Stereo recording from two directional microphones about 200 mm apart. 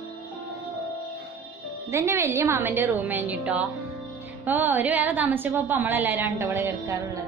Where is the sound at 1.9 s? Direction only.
15° right (ahead or behind).